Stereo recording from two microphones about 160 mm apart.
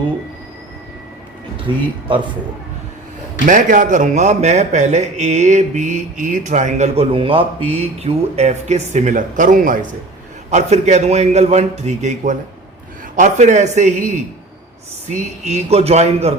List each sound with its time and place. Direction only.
1.6 s speech: 30° right (ahead or behind)
3.4 s a man's voice: 55° right (ahead or behind)
10.5 s a man's voice: 45° right (ahead or behind)
15.1 s a man's voice: 45° right (ahead or behind)